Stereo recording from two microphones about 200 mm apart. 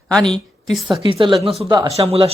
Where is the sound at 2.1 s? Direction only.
30° right (ahead or behind).